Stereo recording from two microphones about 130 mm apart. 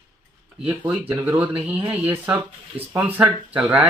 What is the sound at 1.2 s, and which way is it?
Speech, 10° right (ahead or behind).